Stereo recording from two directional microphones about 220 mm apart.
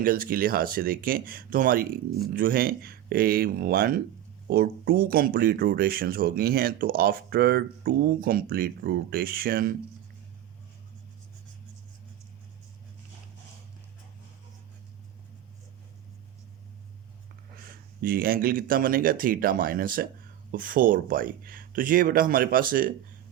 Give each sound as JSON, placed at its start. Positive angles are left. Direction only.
{"t": 0.0, "sound": "speech", "side_deg": -40}
{"t": 17.6, "sound": "speech", "side_deg": -40}